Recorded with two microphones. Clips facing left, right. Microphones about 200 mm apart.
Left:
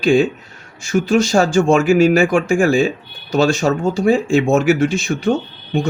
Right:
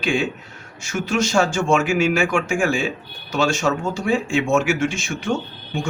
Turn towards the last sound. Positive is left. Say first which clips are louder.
# left 7 dB
turn(degrees=35)  # may be behind; listen again after turning